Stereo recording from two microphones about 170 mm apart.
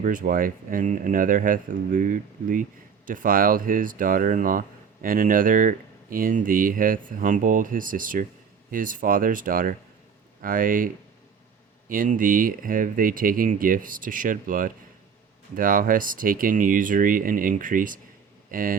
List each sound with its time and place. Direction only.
0.0 s speech: 50° right (ahead or behind)